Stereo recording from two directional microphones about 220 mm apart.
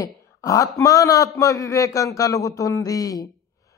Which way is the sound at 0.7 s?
15° left (ahead or behind).